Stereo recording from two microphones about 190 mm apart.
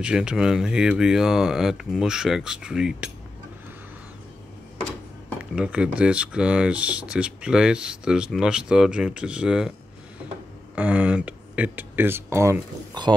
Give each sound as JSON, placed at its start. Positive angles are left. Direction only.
{"t": 0.0, "sound": "speech", "side_deg": -5}
{"t": 5.4, "sound": "speech", "side_deg": -5}
{"t": 10.8, "sound": "speech", "side_deg": -5}